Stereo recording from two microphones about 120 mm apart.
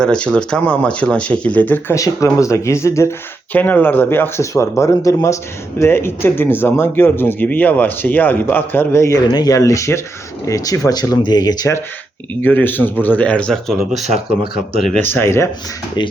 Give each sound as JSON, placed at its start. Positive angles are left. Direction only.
{"t": 0.0, "sound": "speech", "side_deg": 5}
{"t": 2.0, "sound": "speech", "side_deg": 25}
{"t": 12.3, "sound": "speech", "side_deg": 15}
{"t": 15.1, "sound": "speech", "side_deg": 20}
{"t": 16.0, "sound": "speech", "side_deg": 40}